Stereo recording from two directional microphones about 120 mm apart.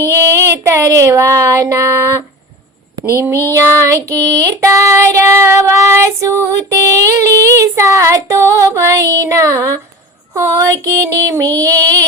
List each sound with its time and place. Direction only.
0.0 s child singing: 20° right (ahead or behind)
3.1 s a sound: 20° right (ahead or behind)
4.4 s child singing: 25° right (ahead or behind)